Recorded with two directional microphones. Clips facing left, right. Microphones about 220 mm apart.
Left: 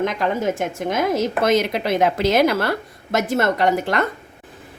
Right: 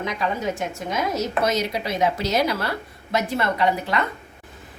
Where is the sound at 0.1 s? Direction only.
50° left (ahead or behind).